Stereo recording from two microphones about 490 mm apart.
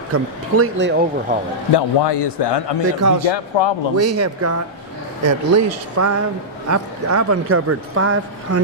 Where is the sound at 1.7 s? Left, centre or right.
Left.